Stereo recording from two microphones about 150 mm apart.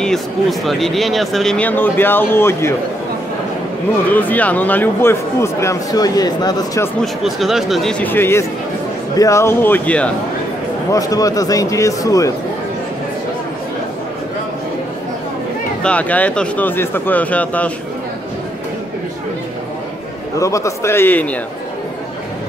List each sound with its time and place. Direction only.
0.0 s speech: centre (ahead or behind)
4.1 s speech: 10° left (ahead or behind)
7.0 s speech: centre (ahead or behind)
8.0 s speech: 15° left (ahead or behind)
10.9 s a man's voice: 25° left (ahead or behind)
15.8 s speech: 10° left (ahead or behind)
20.3 s speech: 20° left (ahead or behind)